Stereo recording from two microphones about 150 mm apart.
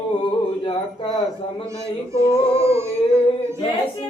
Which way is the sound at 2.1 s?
20° right (ahead or behind).